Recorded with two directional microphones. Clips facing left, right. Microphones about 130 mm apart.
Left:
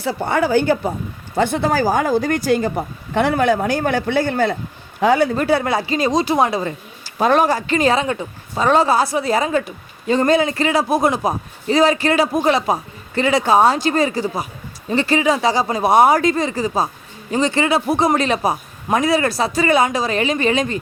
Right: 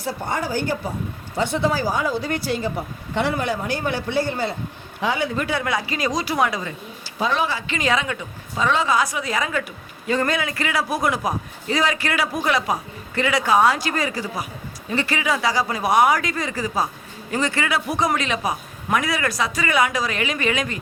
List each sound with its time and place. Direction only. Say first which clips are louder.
0.0 s speech: left 7 dB; 70° left (ahead or behind)
1.4 s a man's voice: left 4 dB; 55° left (ahead or behind)
4.9 s speech: left 8 dB; 45° left (ahead or behind)
7.2 s a woman's voice: left 7 dB; 50° left (ahead or behind); by 20.7 s 30° left (ahead or behind)